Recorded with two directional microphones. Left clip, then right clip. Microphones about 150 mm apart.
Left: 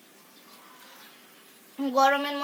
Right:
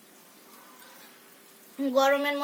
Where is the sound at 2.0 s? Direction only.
30° right (ahead or behind).